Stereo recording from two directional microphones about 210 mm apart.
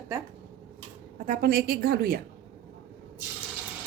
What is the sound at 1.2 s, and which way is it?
Speech, 45° right (ahead or behind).